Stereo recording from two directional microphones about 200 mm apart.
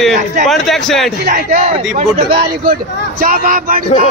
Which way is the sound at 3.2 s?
45° right (ahead or behind).